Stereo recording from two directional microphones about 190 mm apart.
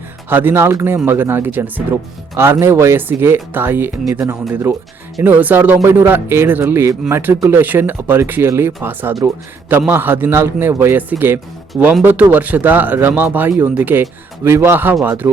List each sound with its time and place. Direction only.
0.3 s speech: 10° right (ahead or behind)